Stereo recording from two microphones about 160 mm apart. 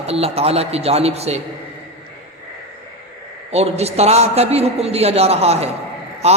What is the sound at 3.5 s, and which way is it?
A man's voice, 40° right (ahead or behind).